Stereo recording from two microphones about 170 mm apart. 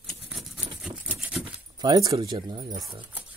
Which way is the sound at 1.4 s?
25° right (ahead or behind).